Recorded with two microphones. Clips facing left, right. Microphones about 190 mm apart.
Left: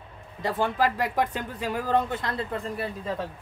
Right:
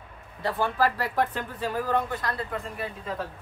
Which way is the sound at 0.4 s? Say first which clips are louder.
Even; 20° left (ahead or behind).